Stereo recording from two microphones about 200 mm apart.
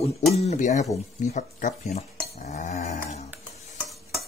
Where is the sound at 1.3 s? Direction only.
35° left (ahead or behind).